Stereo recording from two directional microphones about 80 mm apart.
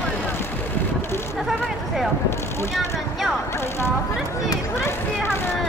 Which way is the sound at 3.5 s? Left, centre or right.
Left.